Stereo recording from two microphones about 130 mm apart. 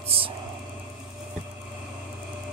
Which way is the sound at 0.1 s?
50° right (ahead or behind).